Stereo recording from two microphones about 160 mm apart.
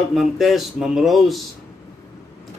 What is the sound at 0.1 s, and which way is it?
Speech, centre (ahead or behind).